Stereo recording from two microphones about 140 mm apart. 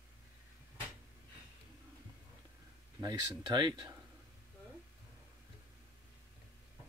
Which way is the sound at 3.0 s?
30° right (ahead or behind).